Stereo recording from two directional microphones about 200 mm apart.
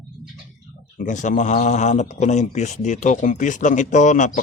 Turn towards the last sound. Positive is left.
turn(degrees=40)  # may be behind; listen again after turning